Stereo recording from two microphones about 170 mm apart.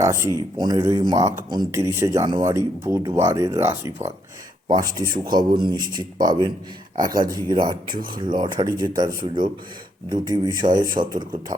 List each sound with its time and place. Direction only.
0.0 s speech: 15° right (ahead or behind)